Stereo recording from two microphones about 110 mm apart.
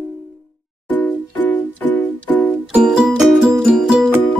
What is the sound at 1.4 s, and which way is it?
Music, 15° left (ahead or behind).